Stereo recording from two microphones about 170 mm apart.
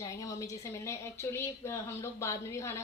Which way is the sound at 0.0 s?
20° left (ahead or behind).